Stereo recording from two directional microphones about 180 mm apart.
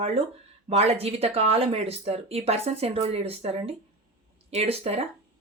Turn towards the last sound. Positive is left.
turn(degrees=-35)  # may be behind; listen again after turning